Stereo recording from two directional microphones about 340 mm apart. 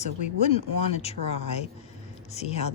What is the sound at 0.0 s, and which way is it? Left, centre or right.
Speech, centre.